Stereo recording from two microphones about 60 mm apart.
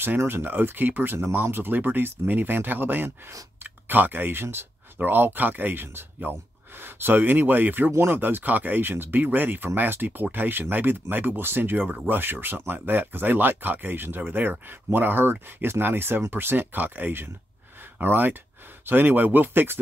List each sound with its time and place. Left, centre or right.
0.3 s speech: right
7.9 s speech: right
8.2 s speech: right